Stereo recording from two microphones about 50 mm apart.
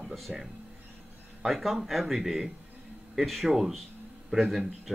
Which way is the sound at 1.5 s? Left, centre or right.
Centre.